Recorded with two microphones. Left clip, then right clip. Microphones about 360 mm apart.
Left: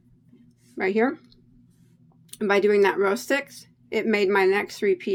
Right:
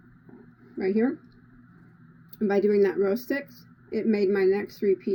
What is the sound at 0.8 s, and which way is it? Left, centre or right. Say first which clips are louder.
Speech: left 3 dB; centre.